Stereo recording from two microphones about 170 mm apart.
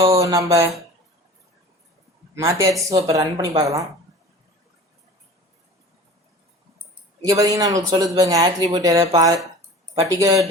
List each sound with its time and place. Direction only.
0.0 s a sound: 20° right (ahead or behind)
2.3 s speech: 15° right (ahead or behind)
7.3 s speech: 20° right (ahead or behind)